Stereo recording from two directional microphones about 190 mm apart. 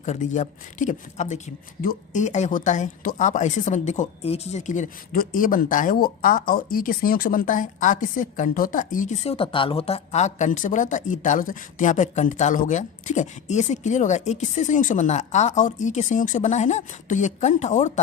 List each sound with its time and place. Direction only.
0.0 s speech: 40° left (ahead or behind)